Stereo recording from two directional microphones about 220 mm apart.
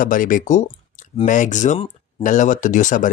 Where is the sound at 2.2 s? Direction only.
35° left (ahead or behind).